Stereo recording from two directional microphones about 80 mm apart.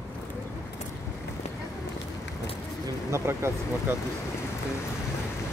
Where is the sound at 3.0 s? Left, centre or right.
Right.